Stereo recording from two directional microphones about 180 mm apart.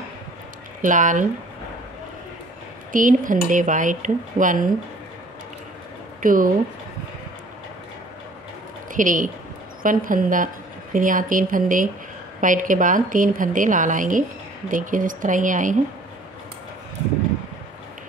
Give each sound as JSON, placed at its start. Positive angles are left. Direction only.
{"t": 0.8, "sound": "speech", "side_deg": -45}
{"t": 2.9, "sound": "speech", "side_deg": -45}
{"t": 6.2, "sound": "speech", "side_deg": -50}
{"t": 8.9, "sound": "a woman's voice", "side_deg": -45}